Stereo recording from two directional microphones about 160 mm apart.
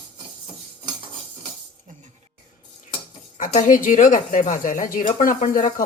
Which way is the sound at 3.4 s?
55° left (ahead or behind).